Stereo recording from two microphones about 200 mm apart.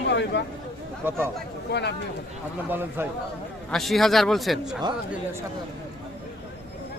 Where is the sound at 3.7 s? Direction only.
Centre (ahead or behind).